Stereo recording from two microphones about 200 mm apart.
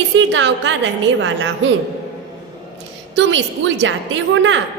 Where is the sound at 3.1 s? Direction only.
65° right (ahead or behind).